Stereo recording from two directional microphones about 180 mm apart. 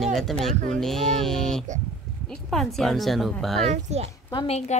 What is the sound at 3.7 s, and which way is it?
Speech, 35° right (ahead or behind).